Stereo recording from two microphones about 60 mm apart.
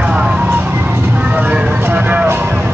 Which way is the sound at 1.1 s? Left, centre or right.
Right.